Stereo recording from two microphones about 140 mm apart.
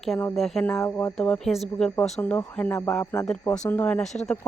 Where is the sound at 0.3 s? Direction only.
Centre (ahead or behind); by 1.1 s 20° left (ahead or behind).